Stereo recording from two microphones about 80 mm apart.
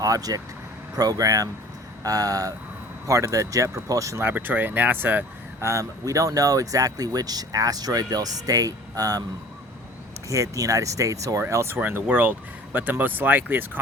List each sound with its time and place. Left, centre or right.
0.0 s speech: right
4.2 s speech: right
5.6 s speech: right
10.2 s speech: right
11.8 s speech: right